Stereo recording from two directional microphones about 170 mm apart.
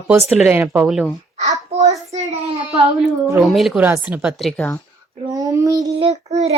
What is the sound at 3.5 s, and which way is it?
Speech, centre (ahead or behind).